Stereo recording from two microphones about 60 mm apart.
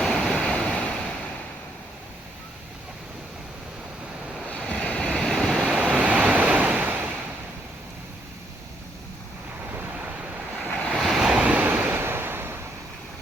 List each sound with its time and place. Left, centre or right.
0.1 s waves: centre
4.6 s waves: centre
5.1 s waves: centre
5.5 s waves: centre
10.7 s waves: left
10.9 s waves: centre
11.3 s waves: centre; by 12.5 s right